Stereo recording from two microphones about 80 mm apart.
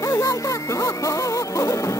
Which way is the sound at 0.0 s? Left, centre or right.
Left.